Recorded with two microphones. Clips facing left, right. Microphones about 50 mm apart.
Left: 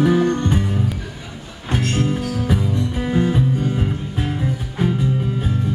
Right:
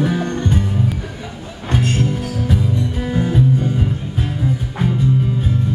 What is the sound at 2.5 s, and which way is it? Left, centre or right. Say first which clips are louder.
Music: right 2 dB; centre.